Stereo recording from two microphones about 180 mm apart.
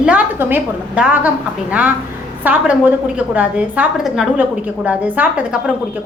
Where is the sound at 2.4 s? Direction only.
10° right (ahead or behind).